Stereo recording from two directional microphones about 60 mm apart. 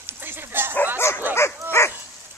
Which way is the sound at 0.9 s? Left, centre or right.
Left.